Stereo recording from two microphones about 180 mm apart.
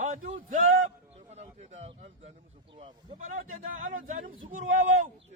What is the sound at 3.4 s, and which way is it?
A man's voice, 50° right (ahead or behind).